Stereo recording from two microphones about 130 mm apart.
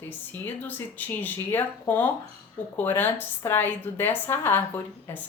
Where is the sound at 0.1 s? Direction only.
15° left (ahead or behind).